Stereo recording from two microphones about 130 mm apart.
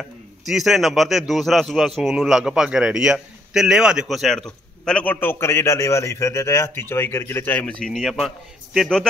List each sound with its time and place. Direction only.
0.0 s a man's voice: centre (ahead or behind)